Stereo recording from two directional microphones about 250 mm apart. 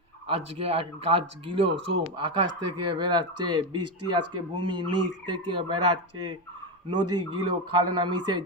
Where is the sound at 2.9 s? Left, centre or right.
Centre.